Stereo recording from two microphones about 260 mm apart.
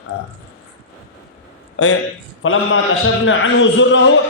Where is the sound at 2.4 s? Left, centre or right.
Left.